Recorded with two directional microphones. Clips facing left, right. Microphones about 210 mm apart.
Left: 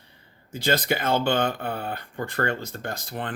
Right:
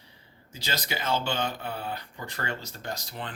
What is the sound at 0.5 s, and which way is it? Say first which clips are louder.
Speech: left 10 dB; 55° left (ahead or behind).